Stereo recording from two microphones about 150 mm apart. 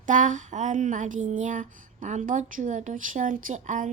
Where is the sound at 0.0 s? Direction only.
55° right (ahead or behind).